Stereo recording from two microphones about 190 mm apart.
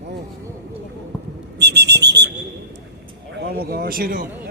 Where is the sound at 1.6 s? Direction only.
60° right (ahead or behind).